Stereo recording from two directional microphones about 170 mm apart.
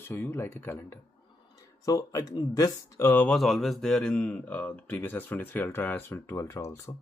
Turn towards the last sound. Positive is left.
turn(degrees=15)  # may be behind; listen again after turning